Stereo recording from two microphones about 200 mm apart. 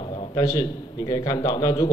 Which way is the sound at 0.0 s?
25° left (ahead or behind).